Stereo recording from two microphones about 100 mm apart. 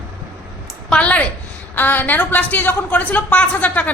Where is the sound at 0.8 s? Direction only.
10° left (ahead or behind).